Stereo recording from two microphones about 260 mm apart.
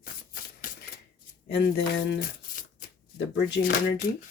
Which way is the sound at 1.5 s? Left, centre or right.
Left.